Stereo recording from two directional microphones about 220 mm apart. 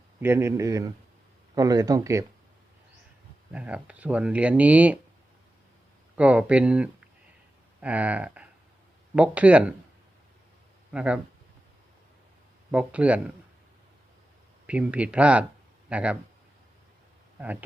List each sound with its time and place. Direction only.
0.2 s speech: 10° right (ahead or behind)
3.5 s speech: 5° right (ahead or behind)
6.1 s speech: 5° right (ahead or behind)
10.9 s speech: 5° right (ahead or behind)
12.7 s speech: 5° right (ahead or behind)
14.7 s speech: 5° right (ahead or behind)